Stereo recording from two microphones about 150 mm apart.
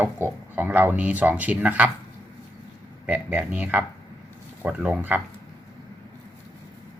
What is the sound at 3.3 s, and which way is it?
Speech, 10° right (ahead or behind).